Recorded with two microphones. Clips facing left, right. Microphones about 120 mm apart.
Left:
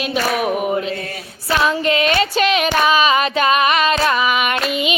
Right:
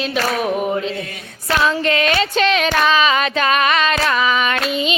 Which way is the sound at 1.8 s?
40° right (ahead or behind).